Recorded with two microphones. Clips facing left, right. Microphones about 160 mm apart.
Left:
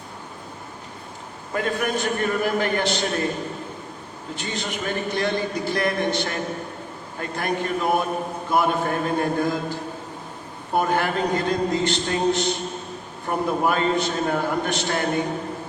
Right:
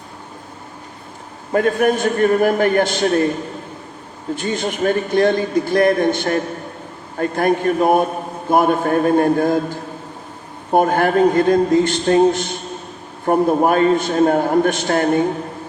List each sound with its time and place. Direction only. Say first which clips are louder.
1.5 s a man's voice: right 9 dB; 50° right (ahead or behind)
4.4 s a man's voice: right 8 dB; 50° right (ahead or behind)